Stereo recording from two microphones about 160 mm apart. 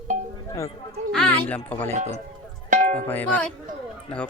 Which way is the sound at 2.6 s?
55° right (ahead or behind).